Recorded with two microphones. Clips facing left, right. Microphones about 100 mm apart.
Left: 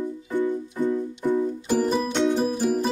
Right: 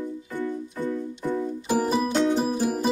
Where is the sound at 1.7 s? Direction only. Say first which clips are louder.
Even; centre (ahead or behind).